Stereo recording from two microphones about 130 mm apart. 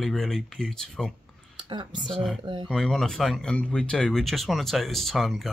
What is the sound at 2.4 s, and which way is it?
Speech, 40° right (ahead or behind).